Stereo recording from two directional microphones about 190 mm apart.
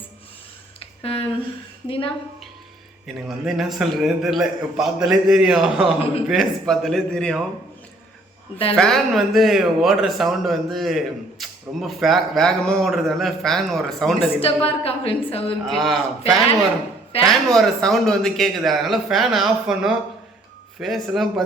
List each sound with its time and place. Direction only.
0.8 s a sound: 30° left (ahead or behind)
1.9 s a woman's voice: 25° left (ahead or behind)
3.2 s speech: centre (ahead or behind)
8.7 s speech: centre (ahead or behind)
14.3 s a woman's voice: 30° left (ahead or behind)
15.6 s speech: centre (ahead or behind)